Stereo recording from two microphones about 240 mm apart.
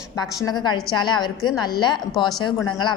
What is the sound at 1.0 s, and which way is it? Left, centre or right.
A woman's voice, centre.